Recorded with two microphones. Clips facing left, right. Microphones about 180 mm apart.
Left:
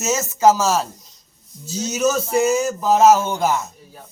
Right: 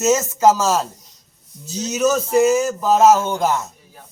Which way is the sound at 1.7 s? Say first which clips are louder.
Right 1 dB; 5° left (ahead or behind).